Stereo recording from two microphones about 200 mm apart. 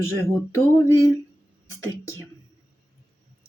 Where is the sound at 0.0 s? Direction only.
15° left (ahead or behind).